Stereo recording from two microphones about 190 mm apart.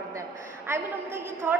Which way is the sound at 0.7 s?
10° right (ahead or behind).